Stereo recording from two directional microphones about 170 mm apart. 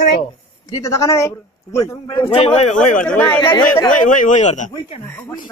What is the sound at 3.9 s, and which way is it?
Speech, 50° left (ahead or behind).